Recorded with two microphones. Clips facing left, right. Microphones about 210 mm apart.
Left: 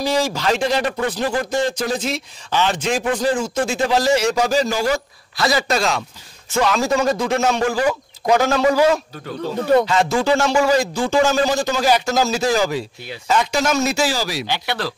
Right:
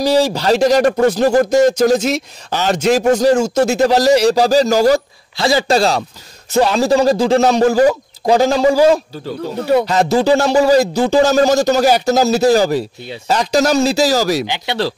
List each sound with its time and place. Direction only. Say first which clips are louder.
0.0 s a man's voice: right 6 dB; 35° right (ahead or behind)
5.3 s a man's voice: right 5 dB; 30° right (ahead or behind)
9.6 s speech: right 1 dB; 5° right (ahead or behind)
9.8 s a man's voice: right 5 dB; 40° right (ahead or behind)
14.4 s speech: right 3 dB; 15° right (ahead or behind)